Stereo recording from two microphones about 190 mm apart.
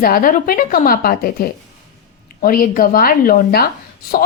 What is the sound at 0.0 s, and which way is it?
A woman's voice, 50° left (ahead or behind).